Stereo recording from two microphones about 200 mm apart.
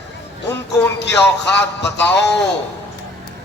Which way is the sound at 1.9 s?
10° left (ahead or behind).